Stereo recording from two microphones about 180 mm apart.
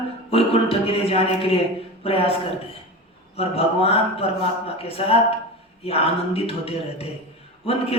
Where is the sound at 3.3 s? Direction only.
35° left (ahead or behind).